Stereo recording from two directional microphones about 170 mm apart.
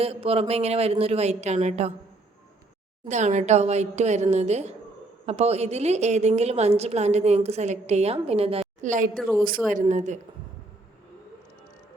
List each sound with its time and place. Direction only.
0.0 s a woman's voice: 35° right (ahead or behind)
3.1 s a woman's voice: 45° right (ahead or behind)
9.1 s speech: centre (ahead or behind)
9.9 s speech: 45° right (ahead or behind)